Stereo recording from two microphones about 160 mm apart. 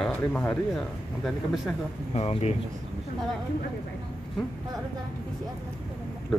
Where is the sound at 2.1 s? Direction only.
40° left (ahead or behind).